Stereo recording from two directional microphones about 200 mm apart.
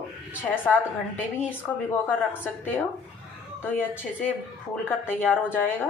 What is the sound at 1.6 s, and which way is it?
Speech, 5° left (ahead or behind).